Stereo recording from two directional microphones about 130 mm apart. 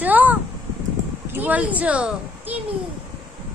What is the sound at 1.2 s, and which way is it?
A child's voice, 15° right (ahead or behind).